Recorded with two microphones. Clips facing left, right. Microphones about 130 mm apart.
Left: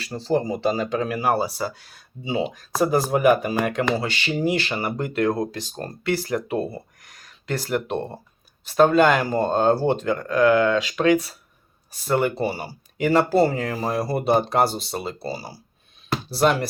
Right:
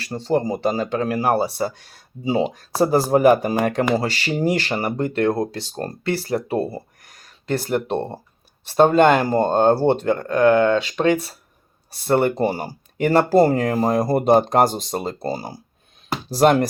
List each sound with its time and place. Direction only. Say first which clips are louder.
0.1 s speech: right 3 dB; 25° right (ahead or behind)
0.4 s speech: right 2 dB; 35° right (ahead or behind)